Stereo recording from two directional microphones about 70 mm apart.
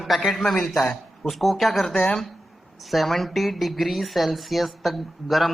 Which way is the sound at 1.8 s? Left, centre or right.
Centre.